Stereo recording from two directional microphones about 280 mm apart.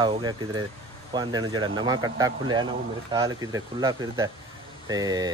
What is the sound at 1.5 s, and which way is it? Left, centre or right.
Speech, centre.